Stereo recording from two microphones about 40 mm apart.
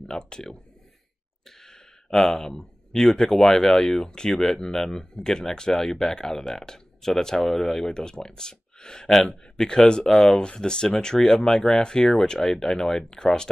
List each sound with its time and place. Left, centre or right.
0.0 s speech: centre
1.6 s speech: centre